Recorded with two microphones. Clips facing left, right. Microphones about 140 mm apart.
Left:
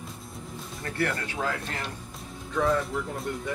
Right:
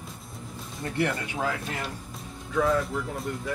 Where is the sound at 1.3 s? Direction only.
5° right (ahead or behind).